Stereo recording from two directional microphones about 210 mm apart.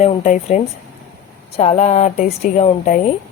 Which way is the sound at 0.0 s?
30° left (ahead or behind).